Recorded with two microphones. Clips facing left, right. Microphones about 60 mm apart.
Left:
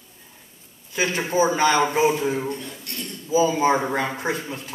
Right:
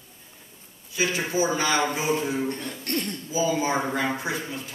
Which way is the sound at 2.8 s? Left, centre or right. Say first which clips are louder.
Right 6 dB; right.